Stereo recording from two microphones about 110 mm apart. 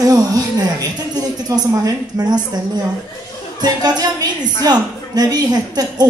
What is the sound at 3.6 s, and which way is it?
A woman's voice, 35° right (ahead or behind).